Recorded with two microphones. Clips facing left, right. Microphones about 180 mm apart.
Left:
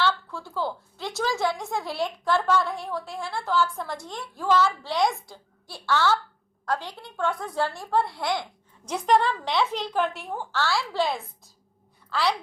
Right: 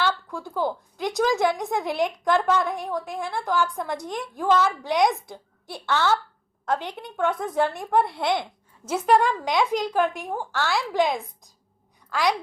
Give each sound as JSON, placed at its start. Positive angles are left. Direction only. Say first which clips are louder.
{"t": 0.0, "sound": "a woman's voice", "louder": "even", "side_deg": -15}
{"t": 8.8, "sound": "speech", "louder": "right 2 dB", "side_deg": -5}